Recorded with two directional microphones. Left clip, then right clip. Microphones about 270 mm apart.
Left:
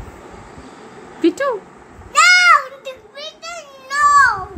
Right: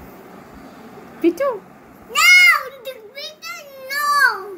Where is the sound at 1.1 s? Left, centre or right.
Centre.